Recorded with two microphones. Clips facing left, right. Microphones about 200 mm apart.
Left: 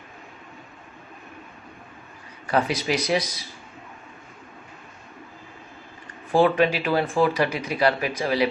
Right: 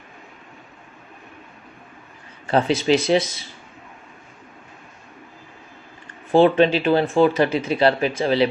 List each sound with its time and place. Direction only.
2.4 s speech: 25° right (ahead or behind)
6.3 s speech: 25° right (ahead or behind)